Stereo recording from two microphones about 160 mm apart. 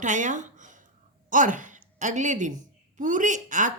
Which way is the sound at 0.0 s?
50° right (ahead or behind).